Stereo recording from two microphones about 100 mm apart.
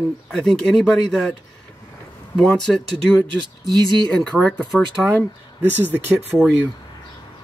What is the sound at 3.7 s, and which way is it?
Speech, 40° right (ahead or behind).